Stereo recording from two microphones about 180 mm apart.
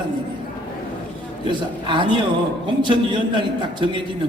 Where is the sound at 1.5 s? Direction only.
25° right (ahead or behind).